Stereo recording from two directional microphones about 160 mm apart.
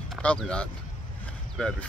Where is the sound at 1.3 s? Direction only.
5° left (ahead or behind).